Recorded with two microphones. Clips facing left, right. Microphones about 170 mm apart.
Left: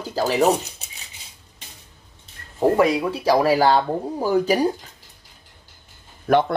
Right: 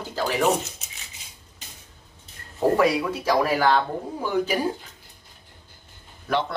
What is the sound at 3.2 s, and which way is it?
Speech, 35° left (ahead or behind).